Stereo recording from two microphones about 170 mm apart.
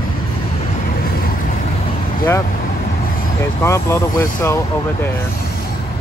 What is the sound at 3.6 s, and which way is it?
Speech, 15° left (ahead or behind).